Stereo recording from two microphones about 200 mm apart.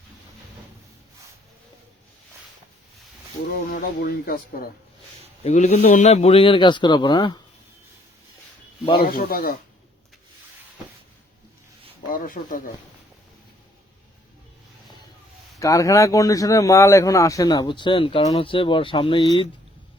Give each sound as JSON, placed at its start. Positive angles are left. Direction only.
{"t": 3.7, "sound": "speech", "side_deg": 45}
{"t": 5.4, "sound": "a man's voice", "side_deg": 35}
{"t": 9.0, "sound": "speech", "side_deg": 45}
{"t": 12.1, "sound": "speech", "side_deg": 40}
{"t": 15.5, "sound": "a man's voice", "side_deg": 15}